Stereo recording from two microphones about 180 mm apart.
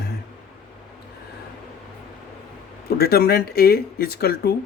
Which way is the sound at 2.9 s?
60° left (ahead or behind).